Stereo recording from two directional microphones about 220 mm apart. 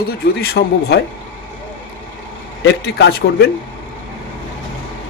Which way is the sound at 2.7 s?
50° left (ahead or behind).